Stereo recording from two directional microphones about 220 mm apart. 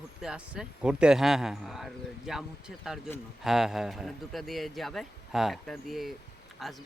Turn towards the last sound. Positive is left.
turn(degrees=0)  # may be behind; listen again after turning